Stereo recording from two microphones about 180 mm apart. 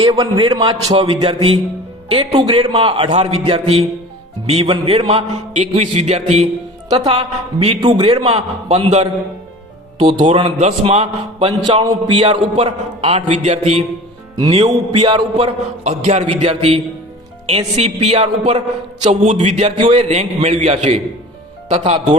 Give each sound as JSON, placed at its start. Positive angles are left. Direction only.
{"t": 0.0, "sound": "a man's voice", "side_deg": -20}
{"t": 15.0, "sound": "a man's voice", "side_deg": -25}
{"t": 15.4, "sound": "a man's voice", "side_deg": -35}